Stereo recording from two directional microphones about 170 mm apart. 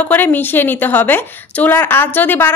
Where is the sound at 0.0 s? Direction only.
10° left (ahead or behind).